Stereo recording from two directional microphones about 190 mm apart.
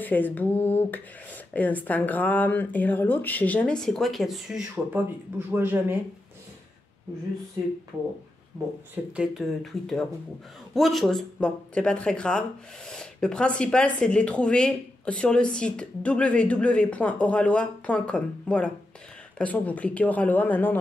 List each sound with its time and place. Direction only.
0.0 s speech: 10° left (ahead or behind); by 5.9 s 10° right (ahead or behind)
8.9 s speech: 5° right (ahead or behind)